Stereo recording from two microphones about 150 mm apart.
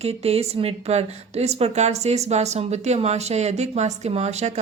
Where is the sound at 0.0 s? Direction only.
45° right (ahead or behind).